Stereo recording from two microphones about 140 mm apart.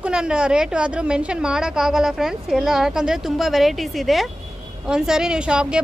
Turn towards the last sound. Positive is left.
turn(degrees=-5)  # may be behind; listen again after turning